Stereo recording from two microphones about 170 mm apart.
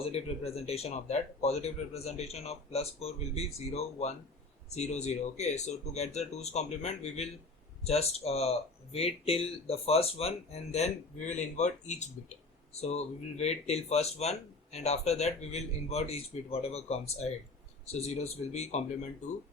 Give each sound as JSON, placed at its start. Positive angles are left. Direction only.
{"t": 0.0, "sound": "speech", "side_deg": 35}